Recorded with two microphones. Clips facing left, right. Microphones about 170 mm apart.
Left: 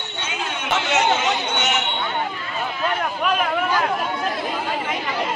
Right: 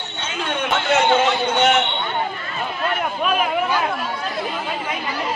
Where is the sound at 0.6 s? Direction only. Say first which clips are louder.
Right 2 dB; 55° right (ahead or behind).